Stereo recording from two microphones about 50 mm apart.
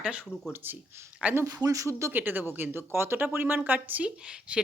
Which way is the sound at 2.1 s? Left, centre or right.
Right.